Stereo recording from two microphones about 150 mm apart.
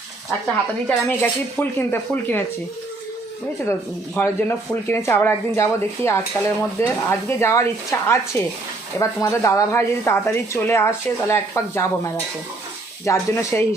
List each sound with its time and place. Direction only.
0.3 s speech: 5° left (ahead or behind)
3.7 s speech: 15° left (ahead or behind)
13.1 s speech: 20° left (ahead or behind)